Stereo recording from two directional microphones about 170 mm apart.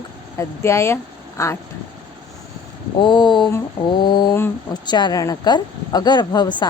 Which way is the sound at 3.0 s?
25° left (ahead or behind).